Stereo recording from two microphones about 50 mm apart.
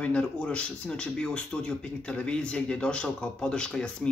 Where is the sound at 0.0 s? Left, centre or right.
Left.